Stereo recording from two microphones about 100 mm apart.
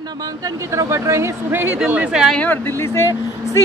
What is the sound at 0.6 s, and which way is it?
A woman's voice, 30° right (ahead or behind).